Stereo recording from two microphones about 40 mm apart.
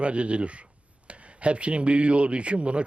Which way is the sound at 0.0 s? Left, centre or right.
Right.